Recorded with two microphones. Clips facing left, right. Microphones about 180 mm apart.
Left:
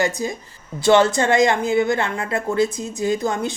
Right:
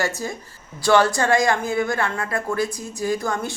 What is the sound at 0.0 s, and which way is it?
A woman's voice, 15° left (ahead or behind).